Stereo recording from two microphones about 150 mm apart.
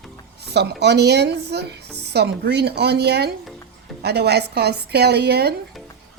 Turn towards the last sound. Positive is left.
turn(degrees=-90)